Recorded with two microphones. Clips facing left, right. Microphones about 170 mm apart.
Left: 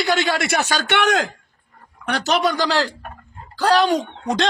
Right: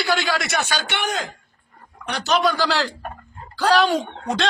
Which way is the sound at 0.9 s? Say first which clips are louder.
Left 7 dB; 75° left (ahead or behind).